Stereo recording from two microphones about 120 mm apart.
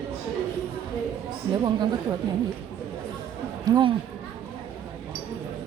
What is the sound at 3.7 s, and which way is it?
Speech, 30° right (ahead or behind).